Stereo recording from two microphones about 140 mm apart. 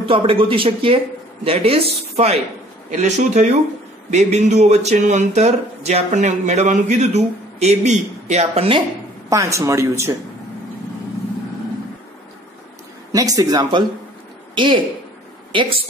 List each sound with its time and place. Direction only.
0.1 s speech: 40° right (ahead or behind)
9.3 s speech: 20° right (ahead or behind)
13.1 s speech: 25° right (ahead or behind)